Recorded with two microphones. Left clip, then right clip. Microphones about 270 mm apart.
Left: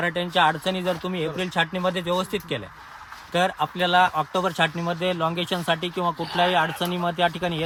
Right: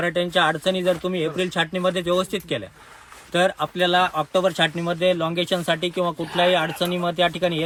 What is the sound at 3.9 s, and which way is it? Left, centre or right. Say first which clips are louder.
Speech: left 1 dB; left.